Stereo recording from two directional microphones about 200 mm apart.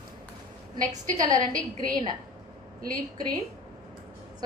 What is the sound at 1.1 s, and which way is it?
Speech, 20° right (ahead or behind).